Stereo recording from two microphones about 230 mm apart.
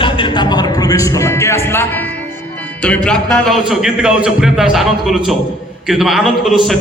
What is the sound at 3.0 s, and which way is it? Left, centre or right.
A man's voice, centre.